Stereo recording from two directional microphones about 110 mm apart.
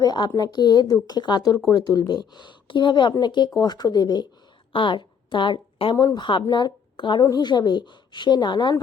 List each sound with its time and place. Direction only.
0.0 s a woman's voice: 40° left (ahead or behind)